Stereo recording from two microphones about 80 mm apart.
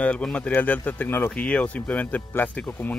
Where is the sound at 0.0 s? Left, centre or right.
Centre.